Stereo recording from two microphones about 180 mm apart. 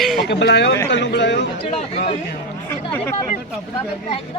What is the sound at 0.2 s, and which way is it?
Speech, 65° left (ahead or behind).